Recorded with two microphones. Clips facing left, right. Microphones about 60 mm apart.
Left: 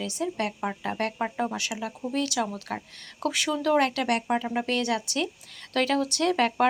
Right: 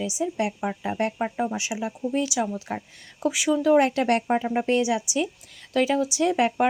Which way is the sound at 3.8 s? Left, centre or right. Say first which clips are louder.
Right 4 dB; right.